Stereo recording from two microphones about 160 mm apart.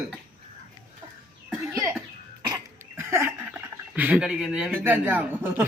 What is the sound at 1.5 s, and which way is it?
Cough, 20° right (ahead or behind).